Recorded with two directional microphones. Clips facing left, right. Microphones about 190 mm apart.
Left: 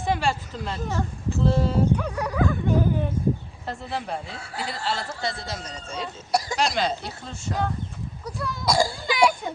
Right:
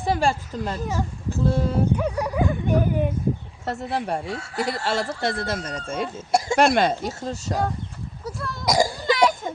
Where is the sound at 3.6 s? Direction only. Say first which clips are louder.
Right 5 dB; 75° right (ahead or behind); by 6.1 s 50° right (ahead or behind).